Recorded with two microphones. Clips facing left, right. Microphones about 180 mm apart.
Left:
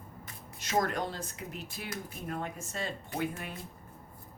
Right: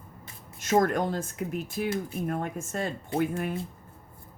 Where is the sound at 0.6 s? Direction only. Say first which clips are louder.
Right 7 dB; 50° right (ahead or behind).